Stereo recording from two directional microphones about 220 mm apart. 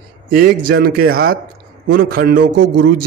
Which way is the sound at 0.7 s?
45° right (ahead or behind).